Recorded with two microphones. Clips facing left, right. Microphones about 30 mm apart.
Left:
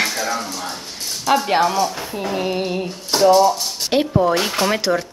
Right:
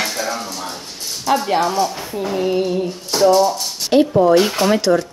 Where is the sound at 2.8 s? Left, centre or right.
Left.